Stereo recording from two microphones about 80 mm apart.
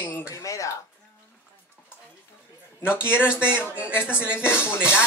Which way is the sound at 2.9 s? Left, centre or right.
Left.